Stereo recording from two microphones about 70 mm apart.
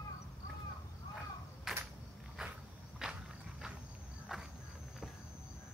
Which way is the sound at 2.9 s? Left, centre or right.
Centre.